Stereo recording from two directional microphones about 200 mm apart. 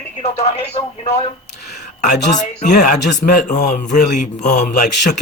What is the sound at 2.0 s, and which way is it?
Speech, 40° left (ahead or behind).